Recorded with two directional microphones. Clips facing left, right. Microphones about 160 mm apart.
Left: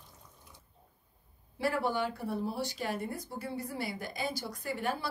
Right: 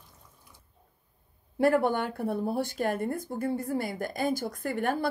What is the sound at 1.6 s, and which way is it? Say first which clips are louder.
Speech: right 7 dB; 55° right (ahead or behind).